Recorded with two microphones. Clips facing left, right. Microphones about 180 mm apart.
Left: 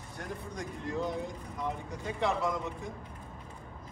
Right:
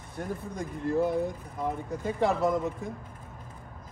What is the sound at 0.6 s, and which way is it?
Speech, 60° right (ahead or behind).